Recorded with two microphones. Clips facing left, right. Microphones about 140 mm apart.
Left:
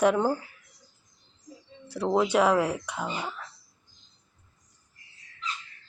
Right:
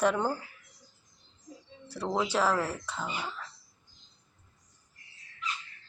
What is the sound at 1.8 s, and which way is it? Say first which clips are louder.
Speech: left 6 dB; 10° left (ahead or behind).